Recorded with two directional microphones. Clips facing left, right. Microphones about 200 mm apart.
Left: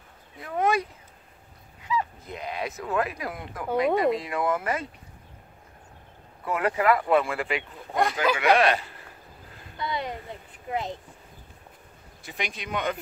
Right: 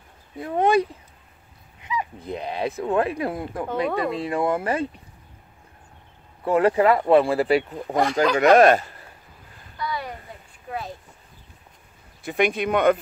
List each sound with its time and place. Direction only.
0.4 s speech: 30° right (ahead or behind)
2.1 s speech: 30° right (ahead or behind)
3.6 s speech: 15° left (ahead or behind)
4.1 s speech: 30° right (ahead or behind)
6.4 s speech: 30° right (ahead or behind)
7.9 s speech: centre (ahead or behind)
8.4 s speech: 45° right (ahead or behind)
9.8 s a sound: 20° left (ahead or behind)
10.7 s speech: 20° left (ahead or behind)
12.2 s speech: 55° right (ahead or behind)